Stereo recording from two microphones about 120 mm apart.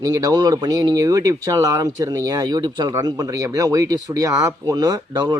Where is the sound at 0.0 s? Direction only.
30° right (ahead or behind).